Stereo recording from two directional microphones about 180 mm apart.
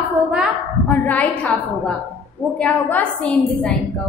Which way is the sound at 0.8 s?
10° left (ahead or behind).